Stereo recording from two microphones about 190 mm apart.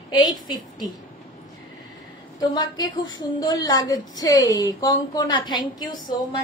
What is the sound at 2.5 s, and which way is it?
A woman's voice, 20° left (ahead or behind).